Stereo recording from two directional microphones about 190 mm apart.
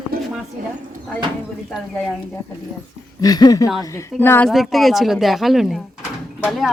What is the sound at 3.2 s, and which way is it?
Speech, 20° left (ahead or behind).